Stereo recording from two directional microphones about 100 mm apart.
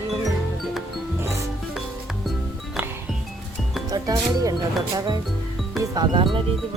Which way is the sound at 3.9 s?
40° right (ahead or behind).